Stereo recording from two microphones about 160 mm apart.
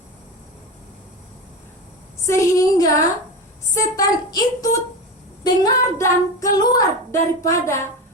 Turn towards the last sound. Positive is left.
turn(degrees=15)  # may be behind; listen again after turning